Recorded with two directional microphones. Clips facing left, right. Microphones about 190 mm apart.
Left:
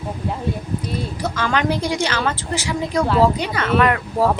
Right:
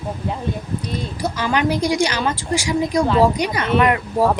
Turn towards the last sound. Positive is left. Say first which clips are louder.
# right 1 dB
turn(degrees=-15)  # may be behind; listen again after turning